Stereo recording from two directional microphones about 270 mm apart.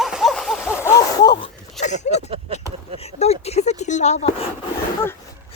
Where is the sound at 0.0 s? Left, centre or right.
Centre.